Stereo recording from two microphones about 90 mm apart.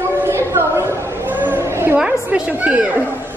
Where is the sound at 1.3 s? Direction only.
25° right (ahead or behind).